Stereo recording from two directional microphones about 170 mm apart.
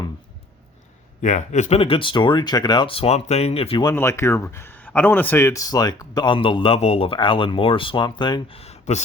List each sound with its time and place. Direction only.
1.2 s speech: 45° left (ahead or behind)
3.8 s speech: 15° left (ahead or behind); by 9.0 s 40° left (ahead or behind)